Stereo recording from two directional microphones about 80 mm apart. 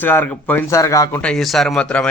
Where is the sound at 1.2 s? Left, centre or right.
Centre.